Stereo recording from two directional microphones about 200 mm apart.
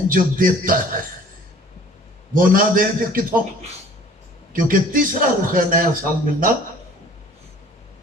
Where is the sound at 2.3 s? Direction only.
45° right (ahead or behind).